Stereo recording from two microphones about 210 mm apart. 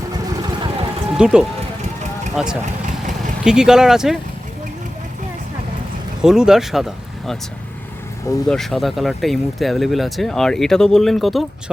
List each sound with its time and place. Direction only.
0.4 s vehicle: 20° right (ahead or behind)
1.1 s speech: 5° right (ahead or behind)
6.2 s speech: 5° right (ahead or behind)
8.4 s speech: centre (ahead or behind)